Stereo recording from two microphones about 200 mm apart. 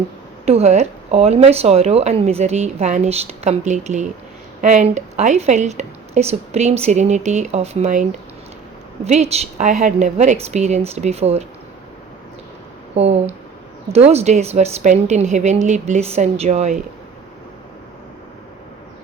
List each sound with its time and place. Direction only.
0.4 s speech: 30° right (ahead or behind)
9.0 s speech: 35° right (ahead or behind)
12.9 s speech: 30° right (ahead or behind)